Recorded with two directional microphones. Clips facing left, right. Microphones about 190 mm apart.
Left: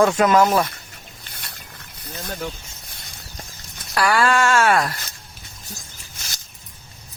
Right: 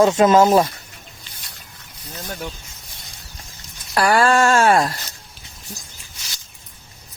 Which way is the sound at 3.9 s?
40° right (ahead or behind).